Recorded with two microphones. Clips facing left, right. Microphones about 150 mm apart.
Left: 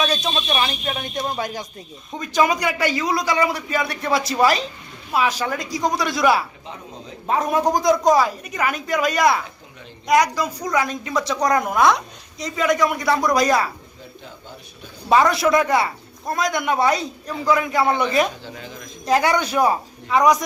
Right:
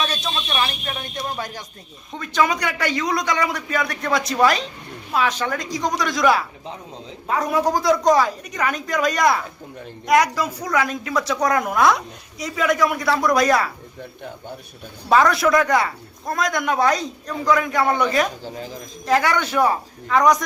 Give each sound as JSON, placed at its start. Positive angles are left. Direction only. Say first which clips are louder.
{"t": 0.0, "sound": "a woman's voice", "louder": "left 3 dB", "side_deg": 15}
{"t": 7.3, "sound": "a woman's voice", "louder": "left 1 dB", "side_deg": 20}
{"t": 15.3, "sound": "a woman's voice", "louder": "even", "side_deg": 0}
{"t": 18.4, "sound": "speech", "louder": "right 4 dB", "side_deg": -40}
{"t": 19.0, "sound": "a woman's voice", "louder": "left 1 dB", "side_deg": 15}